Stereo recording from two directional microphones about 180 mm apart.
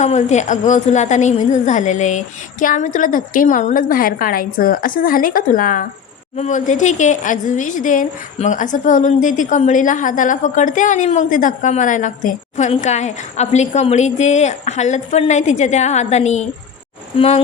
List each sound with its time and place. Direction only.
0.0 s a woman's voice: 40° left (ahead or behind)